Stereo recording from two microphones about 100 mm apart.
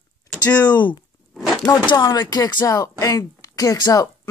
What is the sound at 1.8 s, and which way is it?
Speech, 50° left (ahead or behind).